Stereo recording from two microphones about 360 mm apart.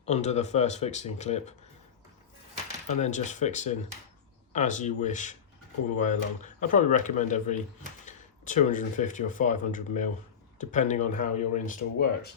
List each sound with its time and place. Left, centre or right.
0.0 s speech: centre
2.9 s speech: centre